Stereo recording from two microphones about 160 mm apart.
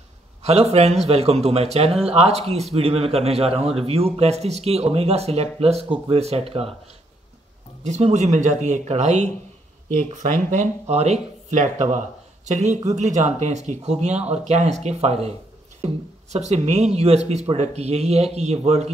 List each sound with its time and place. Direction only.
0.4 s speech: 40° right (ahead or behind)
7.8 s speech: 45° right (ahead or behind)